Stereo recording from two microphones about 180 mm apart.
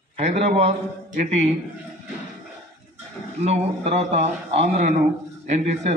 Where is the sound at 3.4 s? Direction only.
35° right (ahead or behind).